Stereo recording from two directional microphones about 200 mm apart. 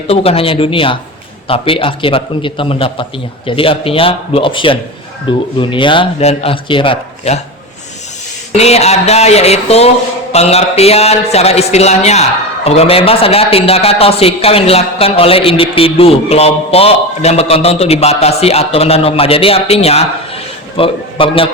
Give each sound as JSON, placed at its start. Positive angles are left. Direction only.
{"t": 0.1, "sound": "a man's voice", "side_deg": 30}
{"t": 8.5, "sound": "a man's voice", "side_deg": 30}